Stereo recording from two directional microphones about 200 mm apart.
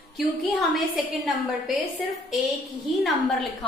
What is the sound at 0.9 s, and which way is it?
Speech, centre (ahead or behind).